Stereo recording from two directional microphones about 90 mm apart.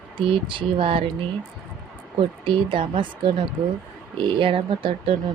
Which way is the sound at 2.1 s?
70° right (ahead or behind).